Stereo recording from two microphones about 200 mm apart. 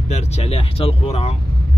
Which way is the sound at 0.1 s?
30° left (ahead or behind).